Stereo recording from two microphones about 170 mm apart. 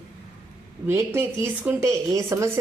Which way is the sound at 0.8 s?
15° right (ahead or behind).